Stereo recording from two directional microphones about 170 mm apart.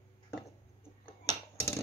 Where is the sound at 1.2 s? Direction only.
15° left (ahead or behind).